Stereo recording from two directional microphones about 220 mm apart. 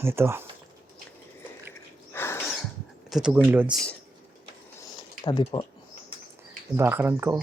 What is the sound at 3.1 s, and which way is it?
Speech, 5° right (ahead or behind).